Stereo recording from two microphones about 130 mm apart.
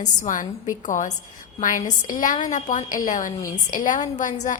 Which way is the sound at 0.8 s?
70° left (ahead or behind).